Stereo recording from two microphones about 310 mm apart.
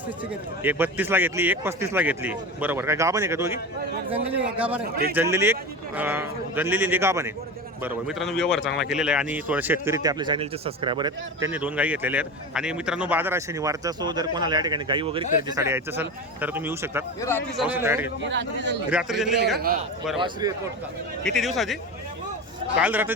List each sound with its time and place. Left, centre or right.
0.6 s a man's voice: centre
17.2 s a man's voice: centre
17.7 s speech: centre
18.3 s a man's voice: right
18.9 s a man's voice: centre
19.5 s a man's voice: right
20.1 s speech: centre
21.2 s a man's voice: centre
22.8 s a man's voice: centre